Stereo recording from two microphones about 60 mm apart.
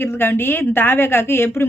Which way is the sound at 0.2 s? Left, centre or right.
Left.